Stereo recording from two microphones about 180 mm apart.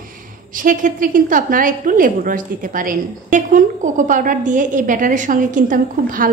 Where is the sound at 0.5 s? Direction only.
50° right (ahead or behind).